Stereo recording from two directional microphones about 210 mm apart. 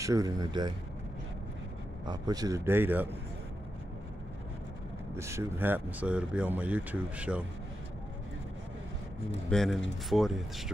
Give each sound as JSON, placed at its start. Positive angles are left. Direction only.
{"t": 0.0, "sound": "speech", "side_deg": -15}
{"t": 2.0, "sound": "speech", "side_deg": -20}
{"t": 5.1, "sound": "speech", "side_deg": -15}
{"t": 9.5, "sound": "speech", "side_deg": 0}